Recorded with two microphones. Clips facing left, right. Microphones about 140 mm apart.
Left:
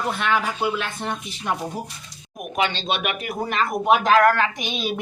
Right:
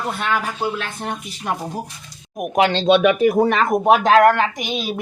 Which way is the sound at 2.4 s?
70° right (ahead or behind).